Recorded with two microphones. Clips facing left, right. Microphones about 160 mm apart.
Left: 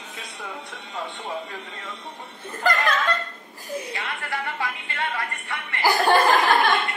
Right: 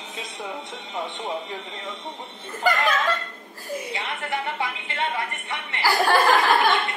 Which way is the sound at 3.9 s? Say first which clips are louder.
Right 2 dB; 20° right (ahead or behind).